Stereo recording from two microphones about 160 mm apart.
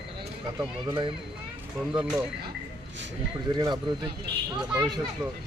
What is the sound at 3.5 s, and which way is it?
Speech, 25° right (ahead or behind).